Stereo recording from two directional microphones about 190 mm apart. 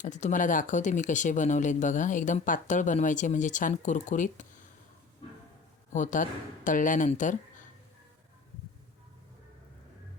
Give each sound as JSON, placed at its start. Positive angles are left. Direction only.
{"t": 0.0, "sound": "speech", "side_deg": 40}
{"t": 5.9, "sound": "speech", "side_deg": 40}